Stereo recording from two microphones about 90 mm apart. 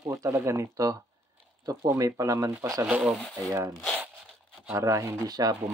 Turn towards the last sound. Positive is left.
turn(degrees=-45)  # may be behind; listen again after turning